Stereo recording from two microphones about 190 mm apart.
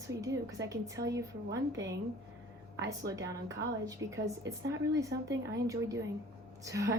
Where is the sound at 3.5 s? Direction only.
75° right (ahead or behind).